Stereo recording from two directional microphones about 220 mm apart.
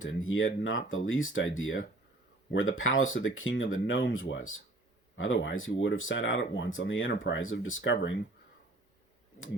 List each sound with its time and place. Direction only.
0.0 s speech: 65° left (ahead or behind)